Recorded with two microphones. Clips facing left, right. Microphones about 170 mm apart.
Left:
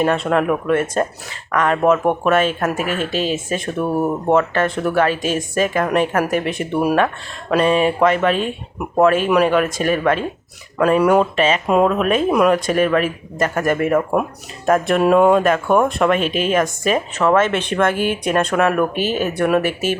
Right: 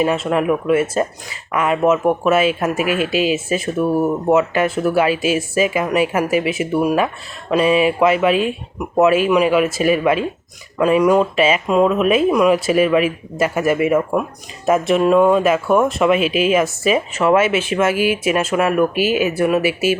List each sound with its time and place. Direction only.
0.0 s speech: 5° right (ahead or behind)
11.3 s speech: 10° right (ahead or behind)